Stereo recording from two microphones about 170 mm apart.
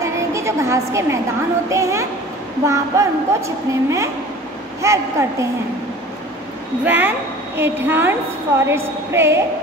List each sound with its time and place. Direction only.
0.0 s a sound: 15° right (ahead or behind)
1.7 s a woman's voice: 15° right (ahead or behind)
6.8 s a woman's voice: 10° right (ahead or behind)